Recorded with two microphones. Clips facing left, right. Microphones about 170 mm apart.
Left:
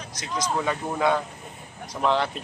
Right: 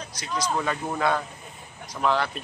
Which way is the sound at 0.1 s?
20° left (ahead or behind).